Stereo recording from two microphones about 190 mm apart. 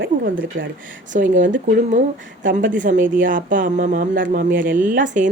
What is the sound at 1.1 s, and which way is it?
Speech, 40° right (ahead or behind).